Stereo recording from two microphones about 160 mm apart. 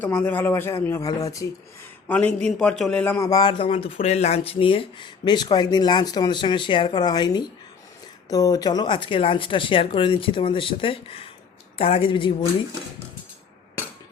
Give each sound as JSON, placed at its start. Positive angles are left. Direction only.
{"t": 0.0, "sound": "speech", "side_deg": 10}
{"t": 3.2, "sound": "speech", "side_deg": 25}